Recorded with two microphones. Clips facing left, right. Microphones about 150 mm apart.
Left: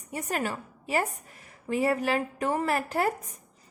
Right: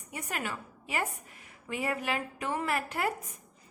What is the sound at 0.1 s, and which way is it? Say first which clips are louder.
A woman's voice: left 6 dB; 35° left (ahead or behind).